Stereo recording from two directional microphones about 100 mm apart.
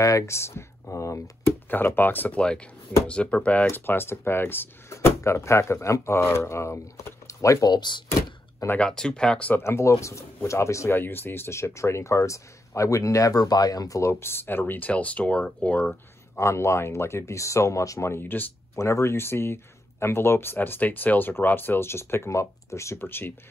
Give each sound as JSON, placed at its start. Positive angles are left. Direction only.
{"t": 0.0, "sound": "speech", "side_deg": 30}
{"t": 7.7, "sound": "speech", "side_deg": 50}
{"t": 8.6, "sound": "speech", "side_deg": 10}
{"t": 9.6, "sound": "speech", "side_deg": 25}
{"t": 16.3, "sound": "speech", "side_deg": 30}